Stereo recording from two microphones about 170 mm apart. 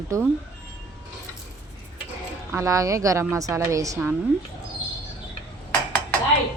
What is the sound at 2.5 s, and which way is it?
A woman's voice, 20° right (ahead or behind).